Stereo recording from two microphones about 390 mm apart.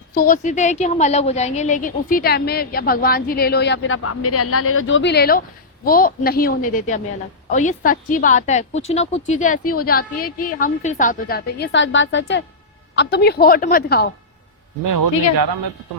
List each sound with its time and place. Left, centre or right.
0.1 s a woman's voice: left
14.8 s a man's voice: right